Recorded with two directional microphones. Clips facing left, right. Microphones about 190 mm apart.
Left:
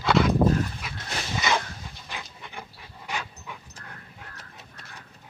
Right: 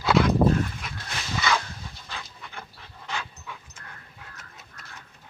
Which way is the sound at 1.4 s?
20° left (ahead or behind).